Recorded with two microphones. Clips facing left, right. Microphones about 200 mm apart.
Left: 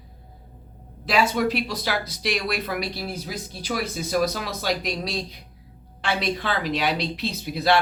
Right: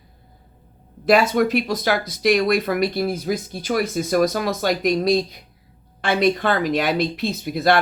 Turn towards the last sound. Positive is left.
turn(degrees=-50)  # may be behind; listen again after turning